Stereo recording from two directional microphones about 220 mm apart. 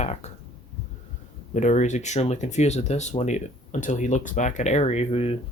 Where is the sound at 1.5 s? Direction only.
35° left (ahead or behind).